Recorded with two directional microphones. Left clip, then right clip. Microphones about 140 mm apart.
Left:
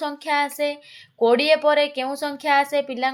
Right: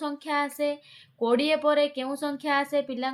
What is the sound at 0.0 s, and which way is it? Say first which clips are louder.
A woman's voice: left 6 dB; 40° left (ahead or behind).